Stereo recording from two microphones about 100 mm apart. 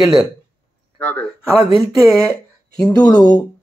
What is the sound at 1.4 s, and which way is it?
Speech, 40° right (ahead or behind).